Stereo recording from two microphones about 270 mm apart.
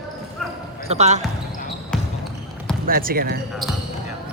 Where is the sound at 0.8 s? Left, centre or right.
Right.